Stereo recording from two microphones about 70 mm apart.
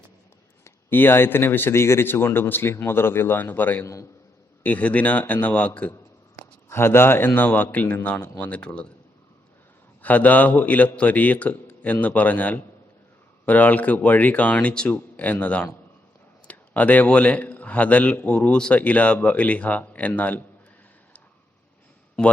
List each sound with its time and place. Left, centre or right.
0.9 s a man's voice: left
5.9 s a man's voice: left; by 8.9 s centre
10.0 s a man's voice: left